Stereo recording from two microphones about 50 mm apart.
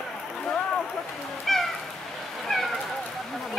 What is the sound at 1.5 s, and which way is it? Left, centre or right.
Cat, centre.